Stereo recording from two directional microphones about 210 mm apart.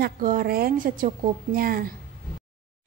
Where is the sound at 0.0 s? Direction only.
40° right (ahead or behind).